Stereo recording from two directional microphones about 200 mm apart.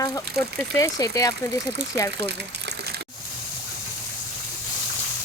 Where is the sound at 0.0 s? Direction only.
15° left (ahead or behind).